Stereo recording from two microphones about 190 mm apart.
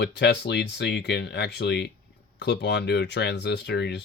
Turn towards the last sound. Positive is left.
turn(degrees=60)  # may be behind; listen again after turning